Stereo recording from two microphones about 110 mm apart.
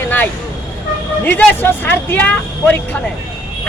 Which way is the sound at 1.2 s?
15° left (ahead or behind).